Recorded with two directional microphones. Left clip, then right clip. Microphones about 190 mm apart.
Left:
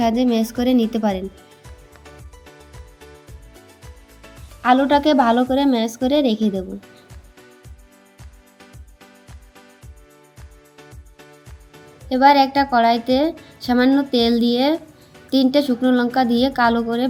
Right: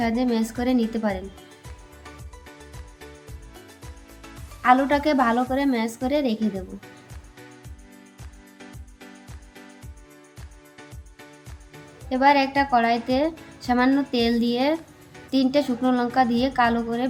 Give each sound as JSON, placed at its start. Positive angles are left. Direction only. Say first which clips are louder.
{"t": 0.0, "sound": "a woman's voice", "louder": "left 6 dB", "side_deg": 25}
{"t": 4.6, "sound": "a woman's voice", "louder": "left 3 dB", "side_deg": 20}
{"t": 12.0, "sound": "a woman's voice", "louder": "left 5 dB", "side_deg": 15}